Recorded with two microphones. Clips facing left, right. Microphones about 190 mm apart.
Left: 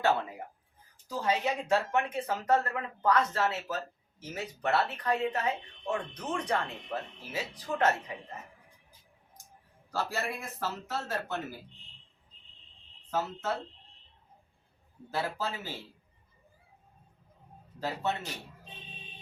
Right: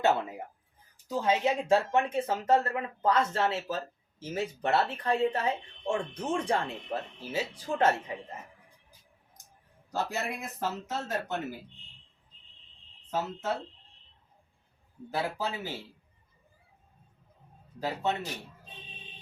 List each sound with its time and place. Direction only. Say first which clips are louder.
0.0 s speech: right 2 dB; 20° right (ahead or behind)
9.9 s speech: right 1 dB; 20° right (ahead or behind)
13.1 s speech: even; 15° right (ahead or behind)
15.1 s speech: right 1 dB; 15° right (ahead or behind)
17.7 s speech: right 2 dB; 15° right (ahead or behind)